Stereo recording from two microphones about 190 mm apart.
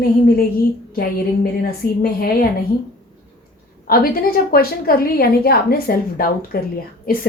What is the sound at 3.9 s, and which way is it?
A woman's voice, 50° left (ahead or behind).